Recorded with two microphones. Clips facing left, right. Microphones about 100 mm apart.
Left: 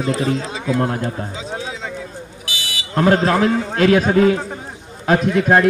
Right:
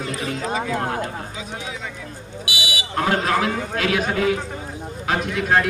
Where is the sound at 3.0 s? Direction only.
35° left (ahead or behind).